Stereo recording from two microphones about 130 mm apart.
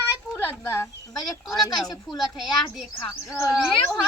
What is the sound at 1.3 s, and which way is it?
A child's voice, centre (ahead or behind).